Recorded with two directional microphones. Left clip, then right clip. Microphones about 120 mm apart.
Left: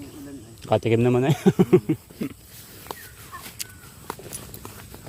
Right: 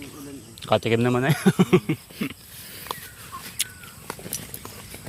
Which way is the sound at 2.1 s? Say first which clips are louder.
Right 1 dB; 20° left (ahead or behind).